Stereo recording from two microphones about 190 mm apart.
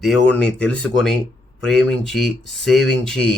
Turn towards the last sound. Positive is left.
turn(degrees=5)  # may be behind; listen again after turning